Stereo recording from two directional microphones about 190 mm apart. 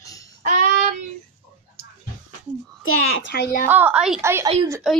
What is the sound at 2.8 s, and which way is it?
Speech, 80° left.